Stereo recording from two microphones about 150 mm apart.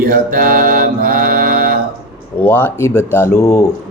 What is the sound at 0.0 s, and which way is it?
Mantra, 75° right (ahead or behind).